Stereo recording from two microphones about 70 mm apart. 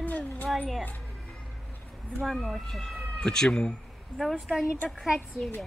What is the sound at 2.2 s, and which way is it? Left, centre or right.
Speech, centre.